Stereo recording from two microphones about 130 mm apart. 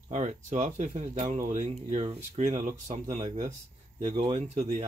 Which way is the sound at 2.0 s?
50° right (ahead or behind).